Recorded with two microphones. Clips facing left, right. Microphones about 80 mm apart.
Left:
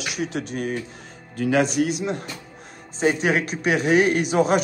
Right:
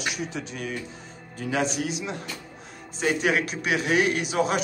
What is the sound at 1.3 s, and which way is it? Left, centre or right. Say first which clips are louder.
Speech: left 7 dB; left.